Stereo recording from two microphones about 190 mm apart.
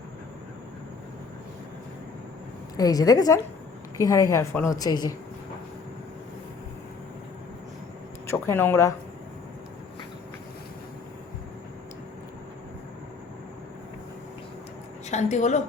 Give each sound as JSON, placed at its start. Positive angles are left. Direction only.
{"t": 2.7, "sound": "a woman's voice", "side_deg": 20}
{"t": 8.3, "sound": "a woman's voice", "side_deg": 10}
{"t": 15.1, "sound": "a woman's voice", "side_deg": 35}